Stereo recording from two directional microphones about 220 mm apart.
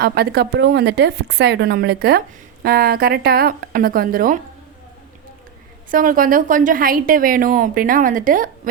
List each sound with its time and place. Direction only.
0.0 s a woman's voice: 45° right (ahead or behind)
5.9 s a woman's voice: 40° right (ahead or behind)